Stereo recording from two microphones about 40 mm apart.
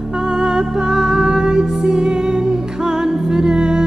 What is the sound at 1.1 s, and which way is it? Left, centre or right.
Music, right.